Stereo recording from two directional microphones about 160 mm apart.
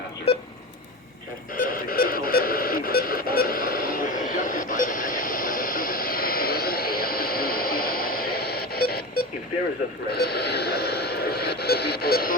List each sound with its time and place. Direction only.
0.3 s a sound: 40° left (ahead or behind)
1.5 s radio: 60° left (ahead or behind)
10.1 s vehicle: 80° left